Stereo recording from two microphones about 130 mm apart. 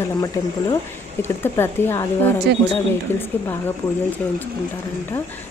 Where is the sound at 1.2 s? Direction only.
20° left (ahead or behind).